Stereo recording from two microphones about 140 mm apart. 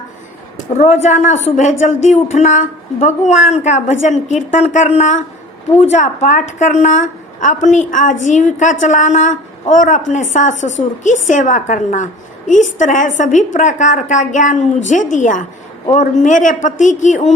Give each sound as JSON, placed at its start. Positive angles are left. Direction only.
{"t": 0.8, "sound": "a woman's voice", "side_deg": 60}